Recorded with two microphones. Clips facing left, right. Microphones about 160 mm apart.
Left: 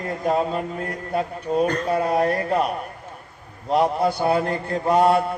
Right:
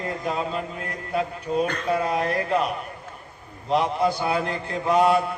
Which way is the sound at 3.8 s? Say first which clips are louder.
Left 3 dB; 35° left (ahead or behind).